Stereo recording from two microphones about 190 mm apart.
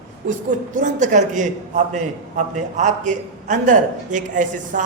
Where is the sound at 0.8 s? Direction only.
40° right (ahead or behind).